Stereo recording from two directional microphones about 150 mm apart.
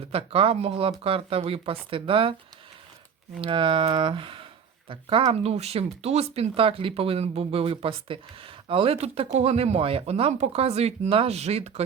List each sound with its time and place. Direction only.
0.1 s speech: 40° right (ahead or behind)
3.4 s speech: 35° right (ahead or behind)